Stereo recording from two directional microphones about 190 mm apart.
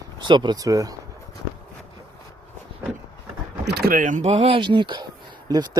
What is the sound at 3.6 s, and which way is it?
Speech, 55° right (ahead or behind).